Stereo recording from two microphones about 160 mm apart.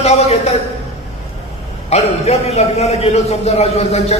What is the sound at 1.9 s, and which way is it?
A man's voice, 40° left (ahead or behind).